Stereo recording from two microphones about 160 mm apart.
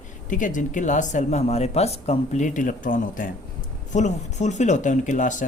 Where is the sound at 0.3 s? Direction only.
55° left (ahead or behind).